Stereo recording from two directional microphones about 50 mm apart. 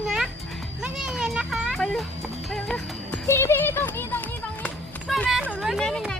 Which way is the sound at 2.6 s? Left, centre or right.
Centre.